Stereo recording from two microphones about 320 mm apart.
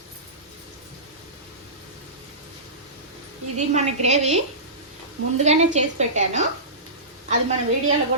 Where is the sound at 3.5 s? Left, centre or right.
Right.